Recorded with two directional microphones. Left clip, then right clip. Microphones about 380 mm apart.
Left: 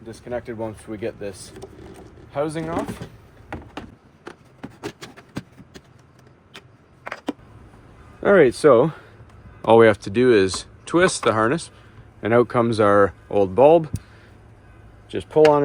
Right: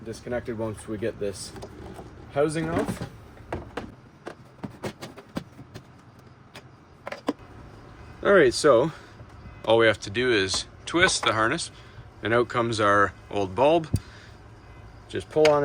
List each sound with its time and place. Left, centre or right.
0.3 s speech: centre
2.3 s speech: centre
8.2 s speech: centre
15.1 s speech: centre